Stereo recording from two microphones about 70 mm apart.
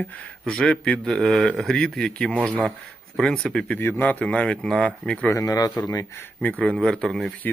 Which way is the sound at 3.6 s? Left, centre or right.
Left.